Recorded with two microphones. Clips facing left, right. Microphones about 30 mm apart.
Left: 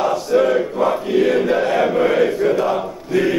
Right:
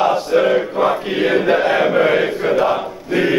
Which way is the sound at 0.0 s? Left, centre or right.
Right.